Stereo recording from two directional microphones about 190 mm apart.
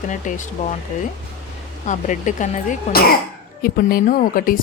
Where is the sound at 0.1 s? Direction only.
40° left (ahead or behind).